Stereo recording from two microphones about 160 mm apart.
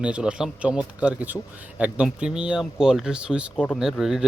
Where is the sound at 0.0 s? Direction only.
5° right (ahead or behind).